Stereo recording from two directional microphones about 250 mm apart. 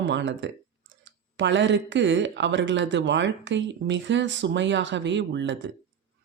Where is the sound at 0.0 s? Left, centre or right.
Right.